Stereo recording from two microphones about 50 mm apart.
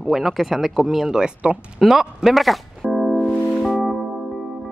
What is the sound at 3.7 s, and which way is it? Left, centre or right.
Music, centre.